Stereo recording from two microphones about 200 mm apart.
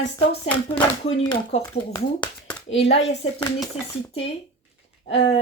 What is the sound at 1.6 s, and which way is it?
Speech, 20° left (ahead or behind).